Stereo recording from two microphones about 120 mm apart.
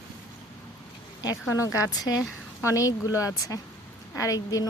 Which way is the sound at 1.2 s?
30° left (ahead or behind).